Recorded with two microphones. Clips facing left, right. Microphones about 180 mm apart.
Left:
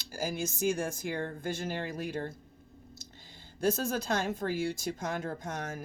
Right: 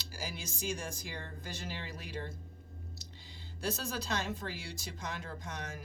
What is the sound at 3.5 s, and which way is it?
Speech, 50° left (ahead or behind).